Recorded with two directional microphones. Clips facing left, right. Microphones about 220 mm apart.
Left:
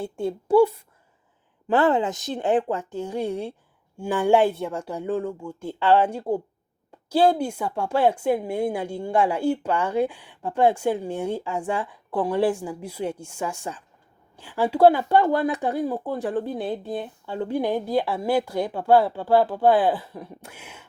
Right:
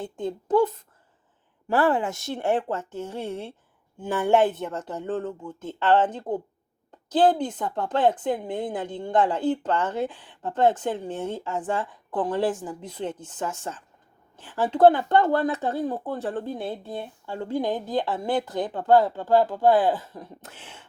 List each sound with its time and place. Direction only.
0.0 s a woman's voice: 10° left (ahead or behind)
1.6 s a woman's voice: 20° left (ahead or behind)